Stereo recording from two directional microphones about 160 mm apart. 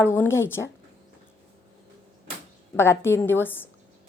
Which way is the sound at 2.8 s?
15° left (ahead or behind).